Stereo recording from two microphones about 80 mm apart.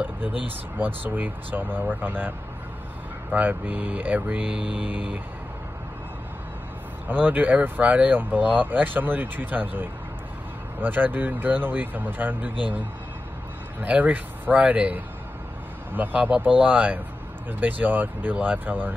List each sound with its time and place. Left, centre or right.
0.7 s speech: right
7.1 s speech: right
13.7 s speech: right